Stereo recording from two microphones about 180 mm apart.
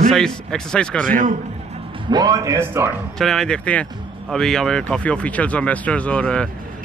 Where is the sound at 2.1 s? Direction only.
20° right (ahead or behind).